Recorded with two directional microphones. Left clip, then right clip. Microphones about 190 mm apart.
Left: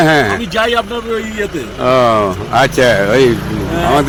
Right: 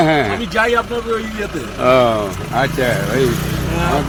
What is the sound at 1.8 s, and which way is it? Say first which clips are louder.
Speech: left 3 dB; 20° left (ahead or behind).